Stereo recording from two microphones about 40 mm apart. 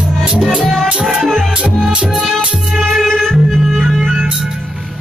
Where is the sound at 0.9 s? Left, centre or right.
Centre.